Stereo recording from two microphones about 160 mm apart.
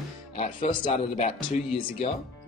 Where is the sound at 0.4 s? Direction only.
30° left (ahead or behind).